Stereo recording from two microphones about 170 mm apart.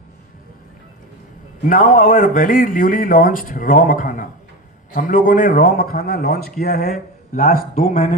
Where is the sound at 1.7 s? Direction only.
50° left (ahead or behind).